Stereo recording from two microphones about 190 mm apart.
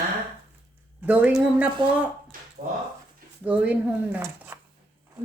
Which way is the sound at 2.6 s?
50° right (ahead or behind).